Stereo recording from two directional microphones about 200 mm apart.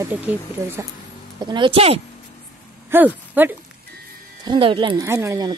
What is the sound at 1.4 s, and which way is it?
Speech, 25° right (ahead or behind).